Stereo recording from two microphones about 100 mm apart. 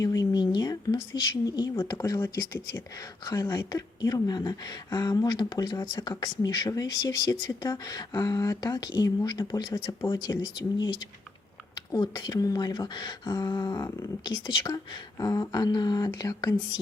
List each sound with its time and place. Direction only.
0.0 s speech: 40° left (ahead or behind)